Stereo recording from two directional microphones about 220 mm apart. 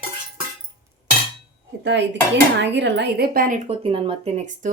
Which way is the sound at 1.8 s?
55° right (ahead or behind).